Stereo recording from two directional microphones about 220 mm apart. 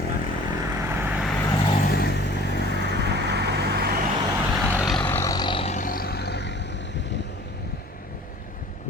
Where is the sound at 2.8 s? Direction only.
50° right (ahead or behind).